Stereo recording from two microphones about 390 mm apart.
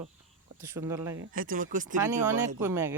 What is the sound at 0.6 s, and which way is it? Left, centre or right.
Speech, centre.